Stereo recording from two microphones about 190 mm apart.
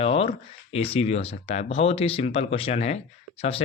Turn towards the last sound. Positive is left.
turn(degrees=30)  # may be behind; listen again after turning